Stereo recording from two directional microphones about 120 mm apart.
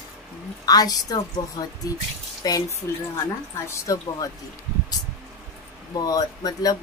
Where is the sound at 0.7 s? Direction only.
30° left (ahead or behind).